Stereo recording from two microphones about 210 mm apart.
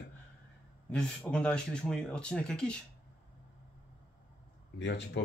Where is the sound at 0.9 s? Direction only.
5° left (ahead or behind).